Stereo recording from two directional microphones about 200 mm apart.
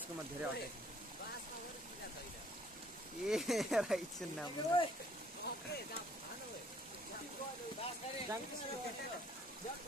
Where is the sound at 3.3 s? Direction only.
Centre (ahead or behind).